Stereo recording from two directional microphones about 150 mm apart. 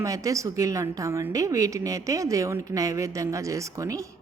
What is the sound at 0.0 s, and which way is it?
A woman's voice, 20° right (ahead or behind).